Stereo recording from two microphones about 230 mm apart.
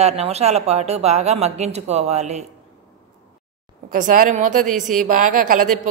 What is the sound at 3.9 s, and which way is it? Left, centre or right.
A woman's voice, right.